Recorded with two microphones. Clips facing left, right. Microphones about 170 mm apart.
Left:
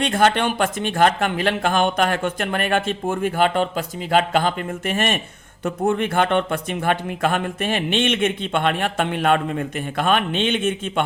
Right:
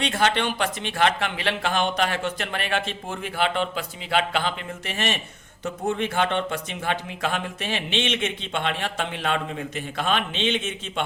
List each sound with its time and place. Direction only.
0.0 s speech: 50° left (ahead or behind)